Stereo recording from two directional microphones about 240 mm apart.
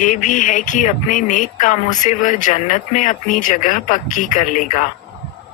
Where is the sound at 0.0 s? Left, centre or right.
Left.